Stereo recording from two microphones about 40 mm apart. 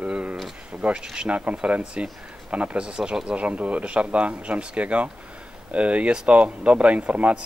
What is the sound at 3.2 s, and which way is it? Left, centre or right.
Speech, right.